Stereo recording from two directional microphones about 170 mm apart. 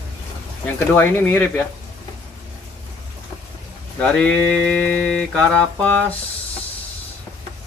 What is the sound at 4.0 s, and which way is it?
Mantra, 5° left (ahead or behind).